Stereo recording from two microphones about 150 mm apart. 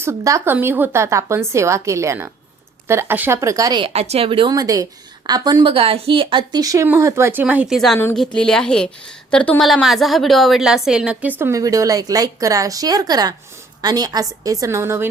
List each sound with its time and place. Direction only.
0.0 s a woman's voice: 20° right (ahead or behind)
3.8 s a woman's voice: 45° right (ahead or behind); by 7.8 s 10° right (ahead or behind)
8.1 s a woman's voice: 5° left (ahead or behind); by 15.1 s 15° right (ahead or behind)